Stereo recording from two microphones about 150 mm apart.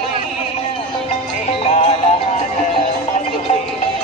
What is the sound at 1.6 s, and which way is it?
Music, 50° left (ahead or behind).